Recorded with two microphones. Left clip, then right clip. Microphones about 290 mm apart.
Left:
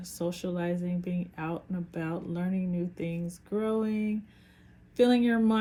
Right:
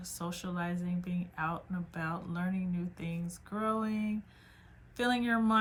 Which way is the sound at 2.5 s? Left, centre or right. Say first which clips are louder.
Left 6 dB; left.